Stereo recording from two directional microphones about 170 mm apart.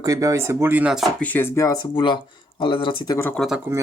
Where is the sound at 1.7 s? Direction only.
30° left (ahead or behind).